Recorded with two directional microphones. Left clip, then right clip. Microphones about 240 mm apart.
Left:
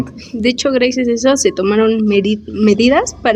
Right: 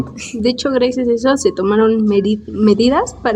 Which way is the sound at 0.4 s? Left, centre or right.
Centre.